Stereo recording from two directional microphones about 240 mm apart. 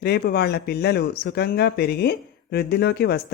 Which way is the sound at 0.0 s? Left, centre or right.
Left.